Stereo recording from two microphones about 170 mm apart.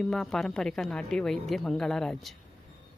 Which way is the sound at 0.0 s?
5° left (ahead or behind).